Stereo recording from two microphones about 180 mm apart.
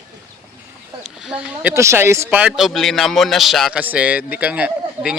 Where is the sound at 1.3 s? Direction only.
5° right (ahead or behind).